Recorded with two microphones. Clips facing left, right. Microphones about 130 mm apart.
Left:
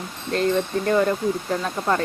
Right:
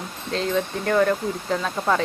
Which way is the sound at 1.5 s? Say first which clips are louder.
Even; centre (ahead or behind).